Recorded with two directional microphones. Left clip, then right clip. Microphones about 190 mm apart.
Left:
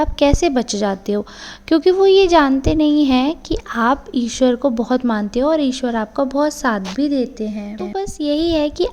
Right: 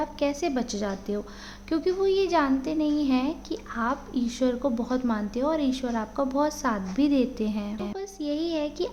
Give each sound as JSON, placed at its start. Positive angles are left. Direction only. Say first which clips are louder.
{"t": 0.0, "sound": "speech", "louder": "left 12 dB", "side_deg": 50}
{"t": 7.0, "sound": "a woman's voice", "louder": "left 3 dB", "side_deg": 25}
{"t": 8.2, "sound": "speech", "louder": "left 11 dB", "side_deg": 40}